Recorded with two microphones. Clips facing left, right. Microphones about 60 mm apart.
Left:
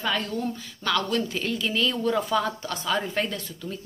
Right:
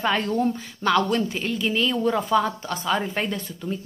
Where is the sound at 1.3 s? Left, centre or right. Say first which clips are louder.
Right 2 dB; centre.